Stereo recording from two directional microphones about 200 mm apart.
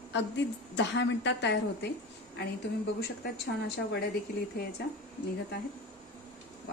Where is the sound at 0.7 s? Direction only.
65° left (ahead or behind).